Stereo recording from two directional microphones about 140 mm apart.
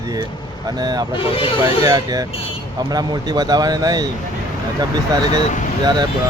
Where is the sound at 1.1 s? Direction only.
40° left (ahead or behind).